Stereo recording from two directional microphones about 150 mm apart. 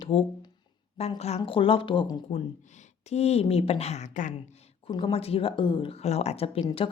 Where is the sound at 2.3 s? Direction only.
50° left (ahead or behind).